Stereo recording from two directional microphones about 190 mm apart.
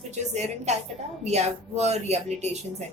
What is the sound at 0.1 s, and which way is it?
Speech, 35° right (ahead or behind).